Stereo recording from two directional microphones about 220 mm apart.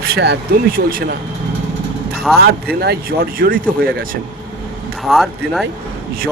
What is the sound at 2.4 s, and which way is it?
Speech, 45° right (ahead or behind).